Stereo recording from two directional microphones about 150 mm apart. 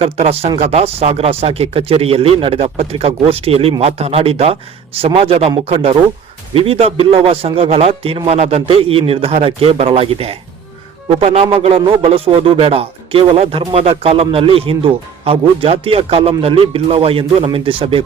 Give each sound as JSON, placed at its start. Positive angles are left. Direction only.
{"t": 0.0, "sound": "a man's voice", "side_deg": -40}